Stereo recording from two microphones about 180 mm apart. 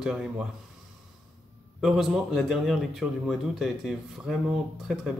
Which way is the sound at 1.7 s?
Centre (ahead or behind).